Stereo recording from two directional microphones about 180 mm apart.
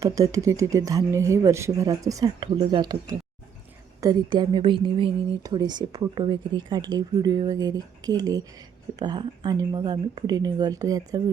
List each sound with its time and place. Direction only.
0.0 s a woman's voice: 20° right (ahead or behind)